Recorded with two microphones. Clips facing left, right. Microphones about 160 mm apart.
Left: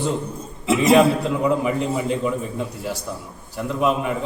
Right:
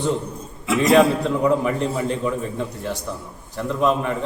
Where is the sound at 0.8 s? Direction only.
5° left (ahead or behind).